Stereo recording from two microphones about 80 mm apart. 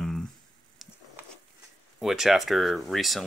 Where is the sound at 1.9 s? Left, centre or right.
Centre.